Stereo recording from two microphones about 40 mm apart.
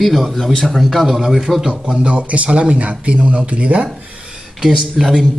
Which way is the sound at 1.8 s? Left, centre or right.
Right.